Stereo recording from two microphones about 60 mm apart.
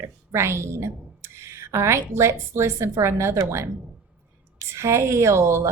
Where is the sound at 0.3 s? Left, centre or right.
Right.